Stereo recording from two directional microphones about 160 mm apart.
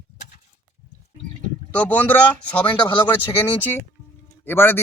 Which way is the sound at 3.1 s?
15° left (ahead or behind).